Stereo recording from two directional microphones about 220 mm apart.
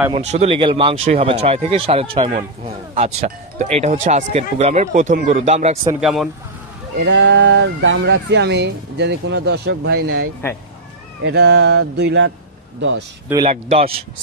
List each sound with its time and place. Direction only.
0.1 s speech: 30° right (ahead or behind)
5.9 s speech: centre (ahead or behind)
7.0 s speech: 50° right (ahead or behind)
11.2 s speech: 50° right (ahead or behind)
13.3 s speech: 20° right (ahead or behind)